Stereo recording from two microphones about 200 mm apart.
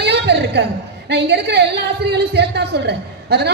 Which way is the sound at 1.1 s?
55° right (ahead or behind).